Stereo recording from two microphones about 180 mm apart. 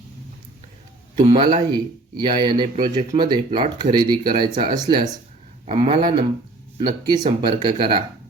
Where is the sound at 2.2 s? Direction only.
25° right (ahead or behind).